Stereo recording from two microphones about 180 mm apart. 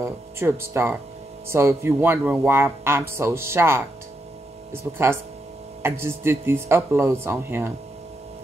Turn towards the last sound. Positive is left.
turn(degrees=-15)  # may be behind; listen again after turning